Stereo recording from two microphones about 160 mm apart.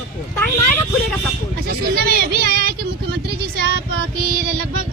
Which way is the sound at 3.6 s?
85° right.